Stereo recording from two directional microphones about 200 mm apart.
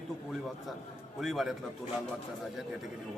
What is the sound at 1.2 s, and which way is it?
Speech, centre (ahead or behind).